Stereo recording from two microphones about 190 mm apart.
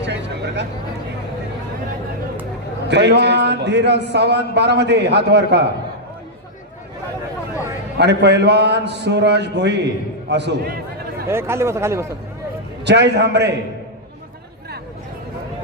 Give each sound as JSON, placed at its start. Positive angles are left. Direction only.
{"t": 0.0, "sound": "a sound", "side_deg": -65}
{"t": 2.9, "sound": "a man's voice", "side_deg": -65}
{"t": 7.9, "sound": "a man's voice", "side_deg": -60}
{"t": 11.3, "sound": "speech", "side_deg": -15}
{"t": 12.8, "sound": "a man's voice", "side_deg": -65}